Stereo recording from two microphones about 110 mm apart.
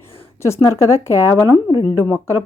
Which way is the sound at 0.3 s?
25° left (ahead or behind).